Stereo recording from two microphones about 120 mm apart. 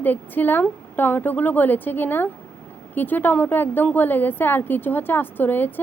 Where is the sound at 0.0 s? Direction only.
15° left (ahead or behind).